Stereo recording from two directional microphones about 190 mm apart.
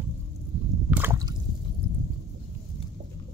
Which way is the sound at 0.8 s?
10° right (ahead or behind).